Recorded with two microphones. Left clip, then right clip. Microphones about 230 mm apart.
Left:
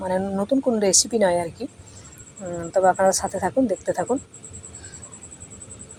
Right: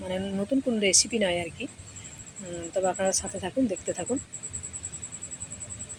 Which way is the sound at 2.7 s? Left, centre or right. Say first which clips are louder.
Left 9 dB; centre.